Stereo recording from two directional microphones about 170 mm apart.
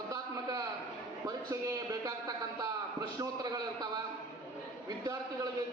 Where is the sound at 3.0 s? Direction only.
25° right (ahead or behind).